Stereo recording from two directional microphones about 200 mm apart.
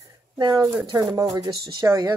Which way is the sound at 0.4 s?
20° right (ahead or behind).